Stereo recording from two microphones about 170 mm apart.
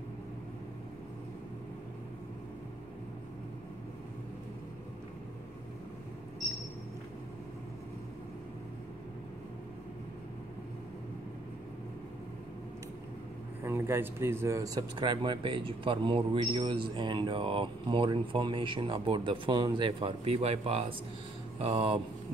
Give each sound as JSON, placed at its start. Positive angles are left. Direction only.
{"t": 13.7, "sound": "speech", "side_deg": -15}